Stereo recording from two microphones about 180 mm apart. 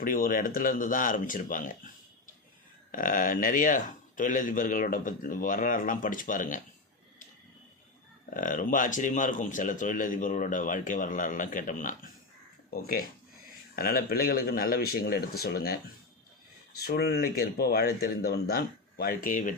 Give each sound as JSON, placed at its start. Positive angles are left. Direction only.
{"t": 0.0, "sound": "a man's voice", "side_deg": 50}
{"t": 8.3, "sound": "a man's voice", "side_deg": 50}
{"t": 13.7, "sound": "speech", "side_deg": 55}
{"t": 16.8, "sound": "speech", "side_deg": 60}